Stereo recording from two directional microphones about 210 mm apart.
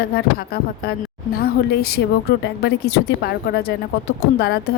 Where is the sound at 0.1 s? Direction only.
45° left (ahead or behind).